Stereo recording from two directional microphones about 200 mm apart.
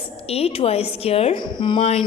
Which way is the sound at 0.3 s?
30° left (ahead or behind).